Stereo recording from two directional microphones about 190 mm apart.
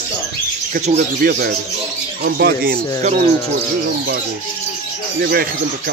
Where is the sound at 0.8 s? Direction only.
45° right (ahead or behind).